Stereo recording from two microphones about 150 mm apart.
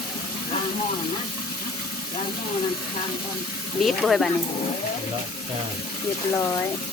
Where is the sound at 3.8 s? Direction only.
Centre (ahead or behind).